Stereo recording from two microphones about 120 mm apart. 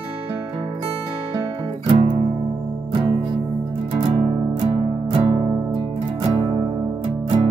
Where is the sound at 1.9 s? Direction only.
50° right (ahead or behind).